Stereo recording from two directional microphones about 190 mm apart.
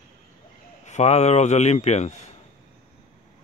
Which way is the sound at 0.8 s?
35° left (ahead or behind).